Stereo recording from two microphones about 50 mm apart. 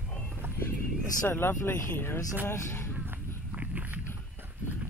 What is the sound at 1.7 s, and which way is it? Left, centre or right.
Speech, left.